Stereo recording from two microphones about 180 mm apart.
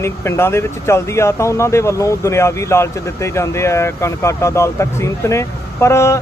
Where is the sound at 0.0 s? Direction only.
15° left (ahead or behind).